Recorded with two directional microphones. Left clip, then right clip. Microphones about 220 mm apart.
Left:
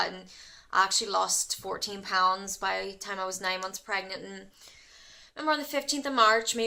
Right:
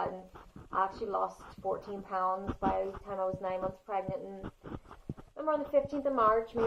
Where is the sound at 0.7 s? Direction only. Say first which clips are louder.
Left 7 dB; 25° left (ahead or behind).